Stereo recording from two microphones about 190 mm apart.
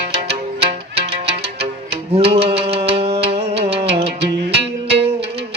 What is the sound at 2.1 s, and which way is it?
Music, 30° right (ahead or behind).